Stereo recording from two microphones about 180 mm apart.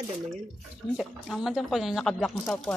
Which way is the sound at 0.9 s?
Centre (ahead or behind).